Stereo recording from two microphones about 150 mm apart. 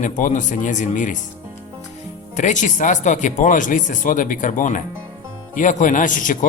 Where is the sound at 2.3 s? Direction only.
55° left (ahead or behind).